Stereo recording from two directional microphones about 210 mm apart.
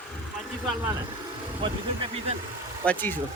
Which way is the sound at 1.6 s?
25° right (ahead or behind).